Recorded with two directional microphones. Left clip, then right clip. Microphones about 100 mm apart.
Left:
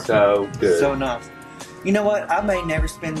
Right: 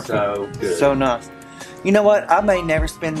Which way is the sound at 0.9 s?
45° right (ahead or behind).